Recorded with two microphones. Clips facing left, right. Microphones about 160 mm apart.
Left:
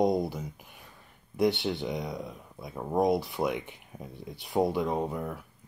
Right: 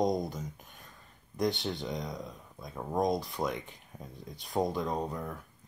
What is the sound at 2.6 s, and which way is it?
Speech, 10° left (ahead or behind).